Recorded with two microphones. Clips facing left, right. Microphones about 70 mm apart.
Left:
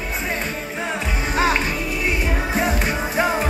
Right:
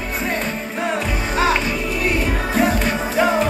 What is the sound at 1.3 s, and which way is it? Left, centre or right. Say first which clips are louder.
Music: right 1 dB; left.